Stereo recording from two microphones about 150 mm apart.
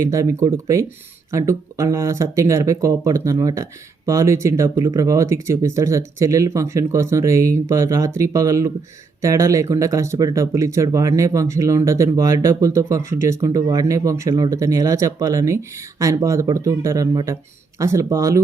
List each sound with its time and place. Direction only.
0.0 s speech: 20° right (ahead or behind)